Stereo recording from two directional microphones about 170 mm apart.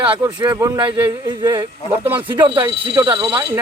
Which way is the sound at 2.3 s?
30° right (ahead or behind).